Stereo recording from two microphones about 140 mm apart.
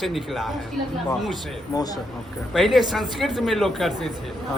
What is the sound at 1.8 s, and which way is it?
Speech, 25° left (ahead or behind).